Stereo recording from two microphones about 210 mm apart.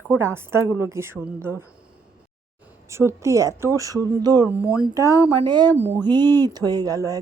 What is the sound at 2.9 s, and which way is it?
Speech, 15° right (ahead or behind).